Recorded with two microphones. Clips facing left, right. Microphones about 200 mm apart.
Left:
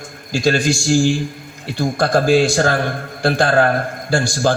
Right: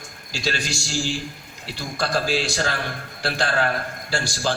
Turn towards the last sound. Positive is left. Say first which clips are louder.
# left 8 dB
turn(degrees=50)  # may be behind; listen again after turning